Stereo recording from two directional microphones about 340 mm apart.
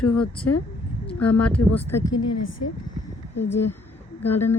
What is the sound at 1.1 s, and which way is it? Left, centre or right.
Speech, centre.